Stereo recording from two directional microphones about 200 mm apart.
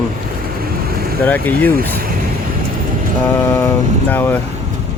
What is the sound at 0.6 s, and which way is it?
Vehicle, 50° right (ahead or behind).